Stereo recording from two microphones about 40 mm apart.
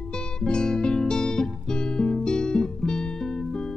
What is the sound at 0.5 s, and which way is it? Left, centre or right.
Music, left.